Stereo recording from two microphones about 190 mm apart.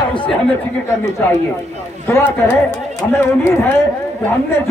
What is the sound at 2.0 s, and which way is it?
A man's voice, 10° left (ahead or behind).